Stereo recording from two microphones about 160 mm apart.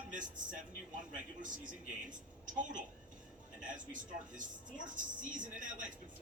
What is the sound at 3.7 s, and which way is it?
Speech, 55° right (ahead or behind).